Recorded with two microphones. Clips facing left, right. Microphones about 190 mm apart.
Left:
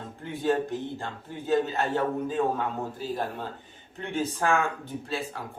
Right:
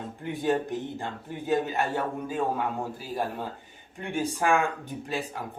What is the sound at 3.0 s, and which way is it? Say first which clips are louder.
Speech: even; 10° right (ahead or behind).